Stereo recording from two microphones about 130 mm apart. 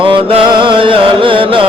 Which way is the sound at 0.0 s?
40° right (ahead or behind).